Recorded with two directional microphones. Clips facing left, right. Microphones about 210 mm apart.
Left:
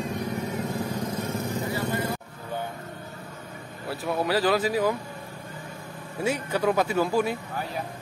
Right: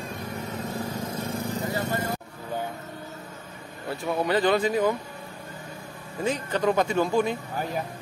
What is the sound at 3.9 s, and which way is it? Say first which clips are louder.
Speech: right 1 dB; 5° left (ahead or behind).